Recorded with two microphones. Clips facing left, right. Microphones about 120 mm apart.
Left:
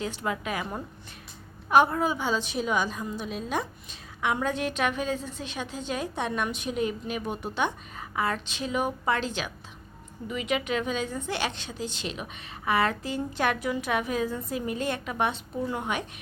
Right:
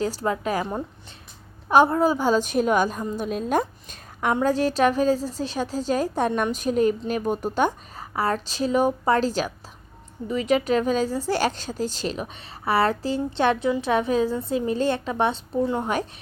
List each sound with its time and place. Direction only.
0.0 s a woman's voice: 35° right (ahead or behind)
1.7 s a woman's voice: 30° right (ahead or behind)